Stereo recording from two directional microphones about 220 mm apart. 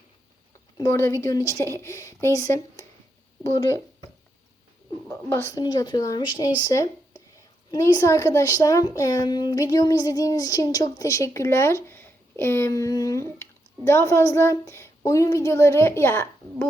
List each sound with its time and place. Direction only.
0.8 s a woman's voice: 15° left (ahead or behind)
5.0 s a woman's voice: 10° left (ahead or behind)